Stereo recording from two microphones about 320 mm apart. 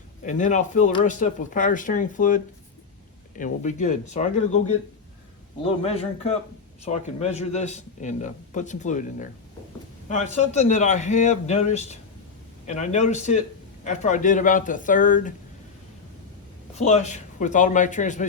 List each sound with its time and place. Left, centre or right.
0.3 s a man's voice: left
5.6 s a man's voice: centre
16.7 s a man's voice: left